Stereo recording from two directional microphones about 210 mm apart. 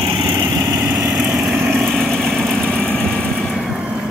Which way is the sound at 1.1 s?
5° right (ahead or behind).